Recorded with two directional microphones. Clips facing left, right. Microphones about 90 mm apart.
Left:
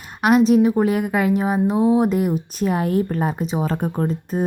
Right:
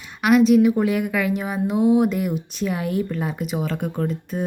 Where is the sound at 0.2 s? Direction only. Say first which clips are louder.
Even; 35° left (ahead or behind).